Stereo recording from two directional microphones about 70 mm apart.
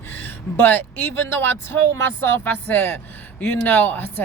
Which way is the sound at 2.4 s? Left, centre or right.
Left.